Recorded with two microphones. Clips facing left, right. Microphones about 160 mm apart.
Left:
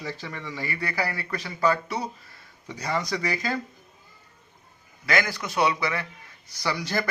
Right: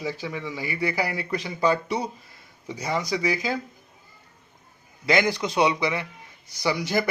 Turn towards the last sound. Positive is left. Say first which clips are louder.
# right 3 dB
turn(degrees=-10)  # may be behind; listen again after turning